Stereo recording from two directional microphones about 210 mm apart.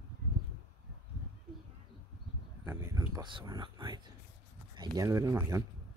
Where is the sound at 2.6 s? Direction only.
10° right (ahead or behind).